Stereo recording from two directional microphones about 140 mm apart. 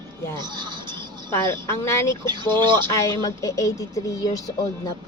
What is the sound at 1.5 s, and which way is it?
Speech, 20° left (ahead or behind).